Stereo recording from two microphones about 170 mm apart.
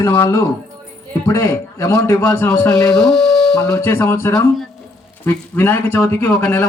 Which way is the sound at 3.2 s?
5° left (ahead or behind).